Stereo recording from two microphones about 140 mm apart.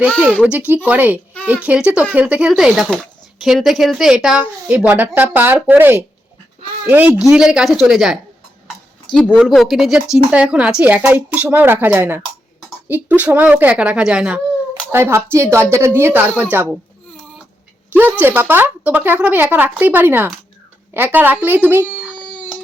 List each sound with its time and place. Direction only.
0.4 s a woman's voice: 10° right (ahead or behind)
9.1 s speech: 35° left (ahead or behind)
9.5 s a woman's voice: centre (ahead or behind)
14.9 s a woman's voice: 15° right (ahead or behind)
18.2 s a woman's voice: 15° right (ahead or behind)